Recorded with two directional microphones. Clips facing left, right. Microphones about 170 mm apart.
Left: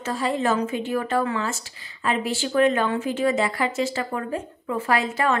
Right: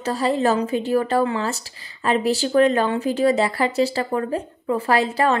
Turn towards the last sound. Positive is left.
turn(degrees=-35)  # may be behind; listen again after turning